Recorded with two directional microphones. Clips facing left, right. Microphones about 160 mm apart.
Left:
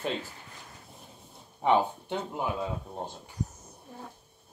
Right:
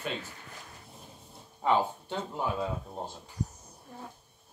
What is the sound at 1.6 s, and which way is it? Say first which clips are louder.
Speech: left 2 dB; 15° left (ahead or behind).